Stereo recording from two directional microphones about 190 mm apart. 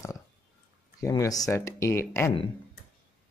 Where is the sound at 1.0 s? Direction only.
15° left (ahead or behind).